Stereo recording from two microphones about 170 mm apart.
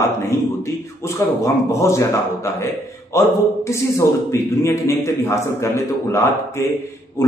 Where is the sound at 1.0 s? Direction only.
15° left (ahead or behind).